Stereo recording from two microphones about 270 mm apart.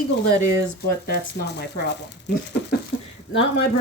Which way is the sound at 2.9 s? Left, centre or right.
Left.